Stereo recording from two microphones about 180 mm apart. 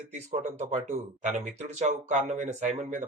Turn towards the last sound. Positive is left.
turn(degrees=-40)  # may be behind; listen again after turning